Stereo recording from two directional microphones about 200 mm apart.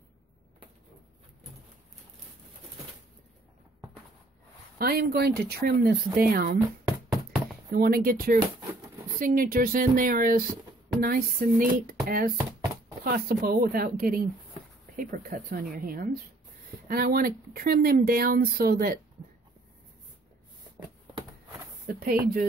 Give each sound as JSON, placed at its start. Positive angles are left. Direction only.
{"t": 4.7, "sound": "speech", "side_deg": -50}
{"t": 7.7, "sound": "speech", "side_deg": -50}
{"t": 21.8, "sound": "speech", "side_deg": -50}